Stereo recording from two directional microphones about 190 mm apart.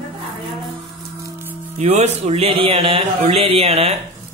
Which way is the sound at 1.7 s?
35° right (ahead or behind).